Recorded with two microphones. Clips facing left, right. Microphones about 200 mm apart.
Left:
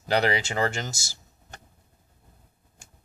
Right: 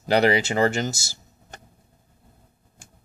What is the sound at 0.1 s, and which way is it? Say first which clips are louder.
Speech: right 5 dB; 5° right (ahead or behind).